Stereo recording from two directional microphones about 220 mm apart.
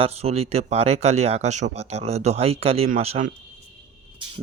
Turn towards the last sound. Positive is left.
turn(degrees=-25)  # may be behind; listen again after turning